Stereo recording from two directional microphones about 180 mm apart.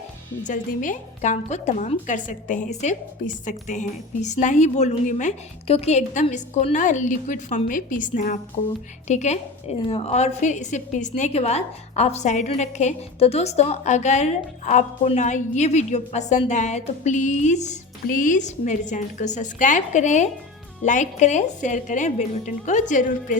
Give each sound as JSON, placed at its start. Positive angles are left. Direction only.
{"t": 0.4, "sound": "a woman's voice", "side_deg": 45}